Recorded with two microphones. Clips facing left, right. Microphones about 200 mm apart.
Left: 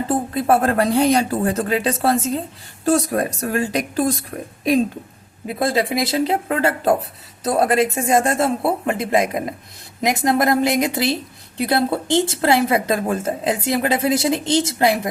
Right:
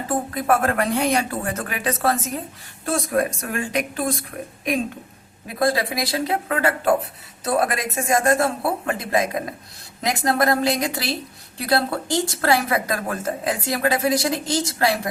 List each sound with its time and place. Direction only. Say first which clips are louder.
0.3 s speech: left 4 dB; 30° left (ahead or behind)
5.5 s a woman's voice: left 2 dB; 25° left (ahead or behind)